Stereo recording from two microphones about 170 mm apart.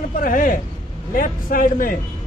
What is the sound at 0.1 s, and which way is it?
Speech, 55° left (ahead or behind).